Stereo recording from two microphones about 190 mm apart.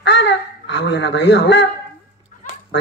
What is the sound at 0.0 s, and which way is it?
Speech, 65° left (ahead or behind).